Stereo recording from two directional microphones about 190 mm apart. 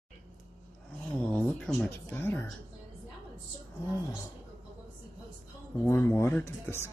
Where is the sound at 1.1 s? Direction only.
5° left (ahead or behind).